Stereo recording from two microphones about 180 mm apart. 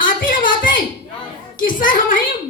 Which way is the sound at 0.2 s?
50° left (ahead or behind).